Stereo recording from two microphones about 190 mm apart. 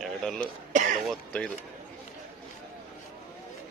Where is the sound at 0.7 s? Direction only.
40° right (ahead or behind).